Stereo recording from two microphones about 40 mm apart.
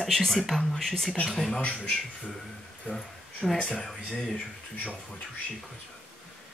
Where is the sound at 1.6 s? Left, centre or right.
Left.